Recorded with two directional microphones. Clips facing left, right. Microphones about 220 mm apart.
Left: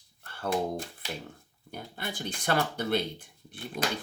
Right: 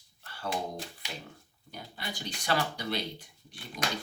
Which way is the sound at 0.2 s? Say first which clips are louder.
Left 5 dB; 50° left (ahead or behind).